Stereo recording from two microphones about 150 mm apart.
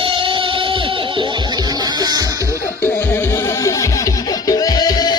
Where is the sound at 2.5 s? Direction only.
15° left (ahead or behind).